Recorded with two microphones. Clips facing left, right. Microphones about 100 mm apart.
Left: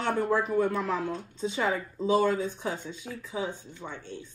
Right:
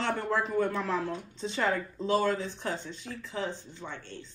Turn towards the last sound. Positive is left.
turn(degrees=10)  # may be behind; listen again after turning